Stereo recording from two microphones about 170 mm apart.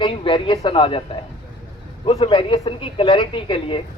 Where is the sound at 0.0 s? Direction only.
30° left (ahead or behind).